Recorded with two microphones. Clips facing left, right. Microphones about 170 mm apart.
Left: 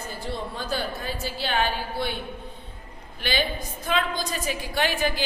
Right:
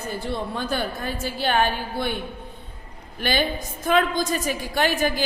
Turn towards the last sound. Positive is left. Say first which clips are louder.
# right 3 dB
turn(degrees=-45)  # may be behind; listen again after turning